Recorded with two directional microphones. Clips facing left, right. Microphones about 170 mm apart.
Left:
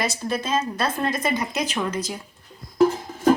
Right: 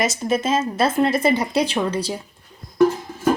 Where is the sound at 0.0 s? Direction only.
20° right (ahead or behind).